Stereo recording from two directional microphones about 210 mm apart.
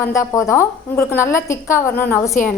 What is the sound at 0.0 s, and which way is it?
A woman's voice, 15° left (ahead or behind).